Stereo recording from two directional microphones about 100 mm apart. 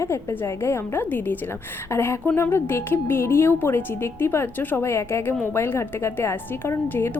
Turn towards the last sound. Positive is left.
turn(degrees=25)  # may be behind; listen again after turning